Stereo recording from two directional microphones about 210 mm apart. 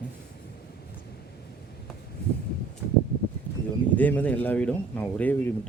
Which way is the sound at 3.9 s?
5° left (ahead or behind).